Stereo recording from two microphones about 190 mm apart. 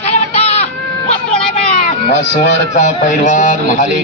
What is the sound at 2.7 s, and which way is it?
Speech, 40° left (ahead or behind).